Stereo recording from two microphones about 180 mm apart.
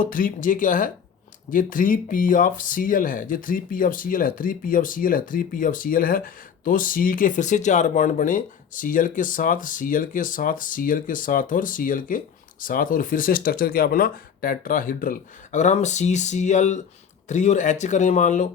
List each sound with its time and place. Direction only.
0.0 s speech: 50° left (ahead or behind)